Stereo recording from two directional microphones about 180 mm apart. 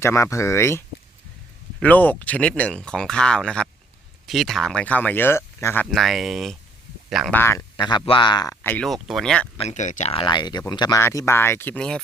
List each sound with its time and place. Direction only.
0.0 s speech: 15° left (ahead or behind)
1.8 s speech: 10° left (ahead or behind)
7.3 s speech: 15° left (ahead or behind)
7.8 s speech: 25° left (ahead or behind)
8.6 s speech: 5° left (ahead or behind)
9.6 s speech: 40° left (ahead or behind); by 11.9 s 5° left (ahead or behind)